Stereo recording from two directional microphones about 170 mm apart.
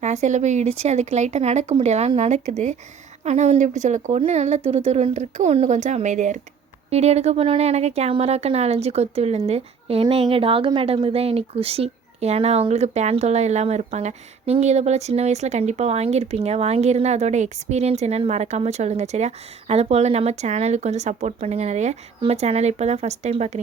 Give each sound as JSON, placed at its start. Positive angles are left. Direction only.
{"t": 0.0, "sound": "speech", "side_deg": -45}